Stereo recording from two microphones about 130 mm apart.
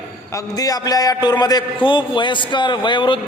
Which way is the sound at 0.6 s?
30° left (ahead or behind).